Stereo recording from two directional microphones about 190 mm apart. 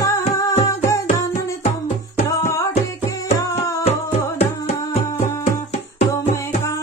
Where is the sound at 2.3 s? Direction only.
15° left (ahead or behind).